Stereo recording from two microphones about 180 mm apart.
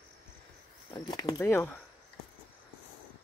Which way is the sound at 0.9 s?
20° left (ahead or behind).